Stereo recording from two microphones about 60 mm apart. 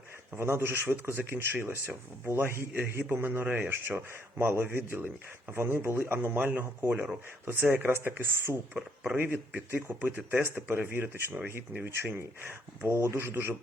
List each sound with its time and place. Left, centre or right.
0.3 s speech: right
6.9 s speech: right
12.1 s speech: right